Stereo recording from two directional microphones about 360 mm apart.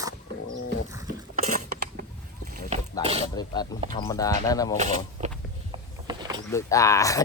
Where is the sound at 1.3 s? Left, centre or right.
Right.